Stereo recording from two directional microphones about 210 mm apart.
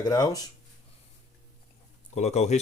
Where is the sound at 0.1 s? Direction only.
15° left (ahead or behind).